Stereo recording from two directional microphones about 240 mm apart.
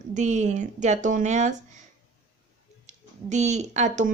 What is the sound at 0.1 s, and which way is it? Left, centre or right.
Speech, right.